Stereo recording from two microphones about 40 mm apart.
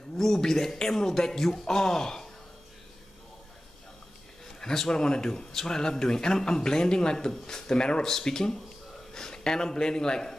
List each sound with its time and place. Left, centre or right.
0.2 s speech: centre
4.6 s speech: centre